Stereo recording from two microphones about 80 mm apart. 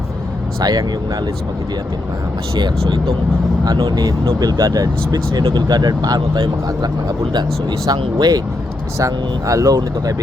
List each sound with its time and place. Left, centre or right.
0.6 s speech: right
2.6 s speech: right
9.0 s speech: right